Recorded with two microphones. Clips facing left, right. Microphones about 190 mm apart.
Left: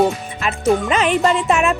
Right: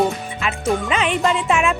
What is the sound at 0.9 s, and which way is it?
Speech, 40° left (ahead or behind).